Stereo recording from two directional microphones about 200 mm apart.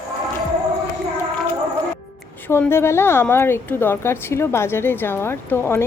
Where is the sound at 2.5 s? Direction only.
10° left (ahead or behind).